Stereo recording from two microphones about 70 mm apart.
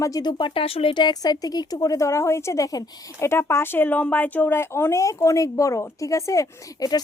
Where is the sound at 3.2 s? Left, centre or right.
Left.